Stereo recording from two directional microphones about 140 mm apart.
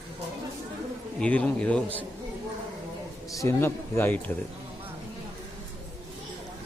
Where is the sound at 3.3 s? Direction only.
20° left (ahead or behind).